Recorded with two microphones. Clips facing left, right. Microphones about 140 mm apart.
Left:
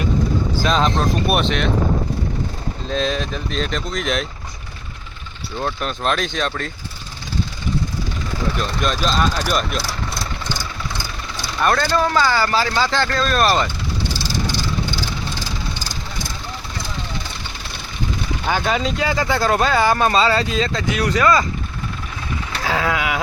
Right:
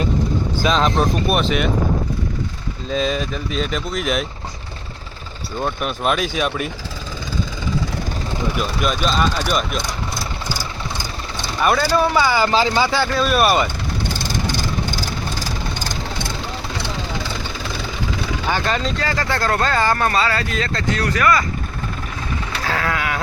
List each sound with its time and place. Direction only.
0.7 s speech: centre (ahead or behind)
2.9 s speech: 5° right (ahead or behind)
5.5 s speech: 10° right (ahead or behind)
8.5 s speech: 5° right (ahead or behind)
9.3 s speech: 10° left (ahead or behind)
9.6 s vehicle: centre (ahead or behind)
10.5 s speech: 15° right (ahead or behind)
14.0 s vehicle: 50° right (ahead or behind)
18.4 s speech: 5° left (ahead or behind); by 21.4 s 20° left (ahead or behind)
22.6 s speech: 15° left (ahead or behind)